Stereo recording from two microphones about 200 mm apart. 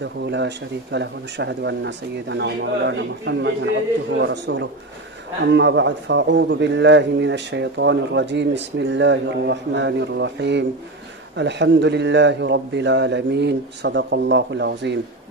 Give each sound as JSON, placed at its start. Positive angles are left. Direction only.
{"t": 0.0, "sound": "a man's voice", "side_deg": -60}